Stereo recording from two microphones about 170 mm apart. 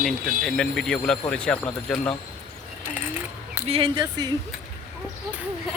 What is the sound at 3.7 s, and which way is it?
Speech, 30° right (ahead or behind).